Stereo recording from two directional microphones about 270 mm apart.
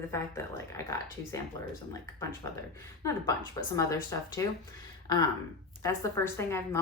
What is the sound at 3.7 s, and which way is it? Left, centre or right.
A woman's voice, centre.